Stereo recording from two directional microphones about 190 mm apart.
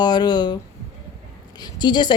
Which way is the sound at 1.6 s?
25° left (ahead or behind).